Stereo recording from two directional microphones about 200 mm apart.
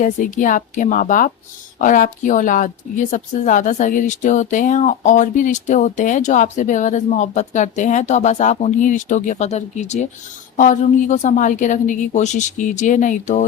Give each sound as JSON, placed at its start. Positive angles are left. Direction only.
{"t": 0.0, "sound": "a woman's voice", "side_deg": 40}